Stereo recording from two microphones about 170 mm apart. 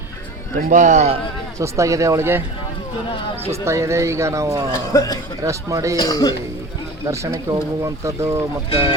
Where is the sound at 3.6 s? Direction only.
15° right (ahead or behind).